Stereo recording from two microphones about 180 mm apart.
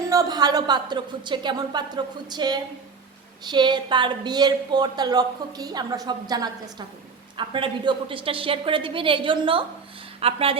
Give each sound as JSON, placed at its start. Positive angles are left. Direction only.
{"t": 0.1, "sound": "a woman's voice", "side_deg": -20}